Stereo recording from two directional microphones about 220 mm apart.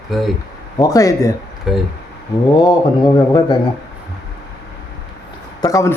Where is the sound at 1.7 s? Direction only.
Centre (ahead or behind).